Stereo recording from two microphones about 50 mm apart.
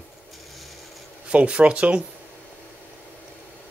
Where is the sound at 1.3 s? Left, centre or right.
Right.